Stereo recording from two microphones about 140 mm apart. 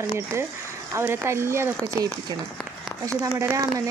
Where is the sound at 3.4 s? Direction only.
20° right (ahead or behind).